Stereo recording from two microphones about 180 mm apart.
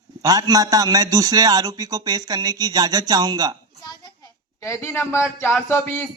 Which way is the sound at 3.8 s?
20° left (ahead or behind).